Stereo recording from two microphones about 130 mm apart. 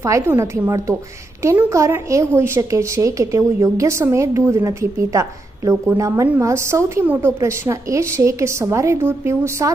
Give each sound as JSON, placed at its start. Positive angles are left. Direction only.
{"t": 0.0, "sound": "a woman's voice", "side_deg": -20}